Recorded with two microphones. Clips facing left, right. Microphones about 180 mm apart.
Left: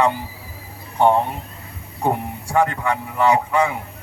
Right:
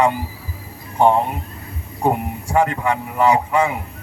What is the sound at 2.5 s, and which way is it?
Speech, 20° right (ahead or behind).